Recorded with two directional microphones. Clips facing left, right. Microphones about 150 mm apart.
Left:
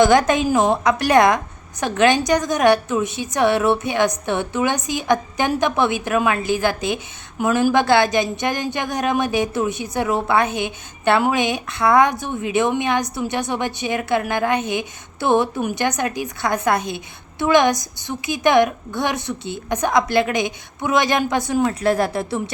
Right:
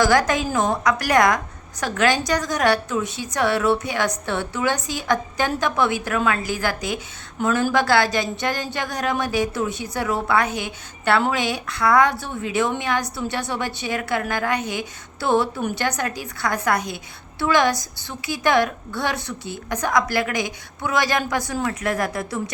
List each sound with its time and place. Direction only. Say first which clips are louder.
0.0 s a woman's voice: left 4 dB; 20° left (ahead or behind)